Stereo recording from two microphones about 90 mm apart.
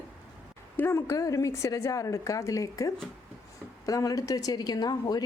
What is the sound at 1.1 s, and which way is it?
A woman's voice, 35° left (ahead or behind).